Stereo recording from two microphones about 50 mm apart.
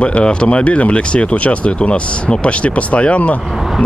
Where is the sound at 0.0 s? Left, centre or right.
Left.